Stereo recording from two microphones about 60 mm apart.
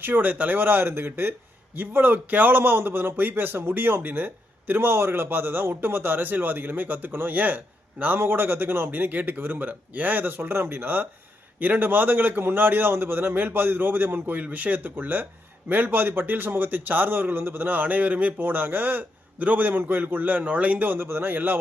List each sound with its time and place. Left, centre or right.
0.0 s a man's voice: right